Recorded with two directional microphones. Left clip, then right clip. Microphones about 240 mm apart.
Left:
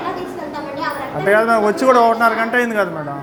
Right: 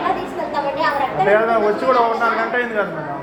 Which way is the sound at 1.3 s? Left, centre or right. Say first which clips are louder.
Left 4 dB; left.